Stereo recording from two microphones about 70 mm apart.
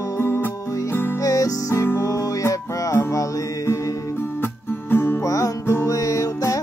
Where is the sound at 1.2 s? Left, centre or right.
Left.